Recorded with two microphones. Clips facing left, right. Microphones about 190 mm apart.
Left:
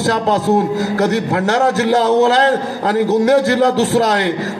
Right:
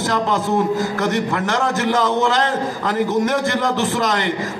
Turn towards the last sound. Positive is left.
turn(degrees=40)  # may be behind; listen again after turning